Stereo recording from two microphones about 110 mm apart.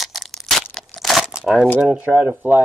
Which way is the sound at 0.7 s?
Centre (ahead or behind).